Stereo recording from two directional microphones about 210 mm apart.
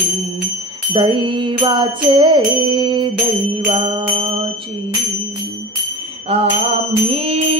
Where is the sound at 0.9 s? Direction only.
25° right (ahead or behind).